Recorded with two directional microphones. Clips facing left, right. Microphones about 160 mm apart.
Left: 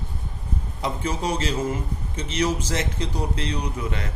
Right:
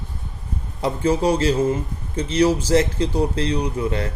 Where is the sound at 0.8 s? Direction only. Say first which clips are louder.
Right 8 dB; 30° right (ahead or behind).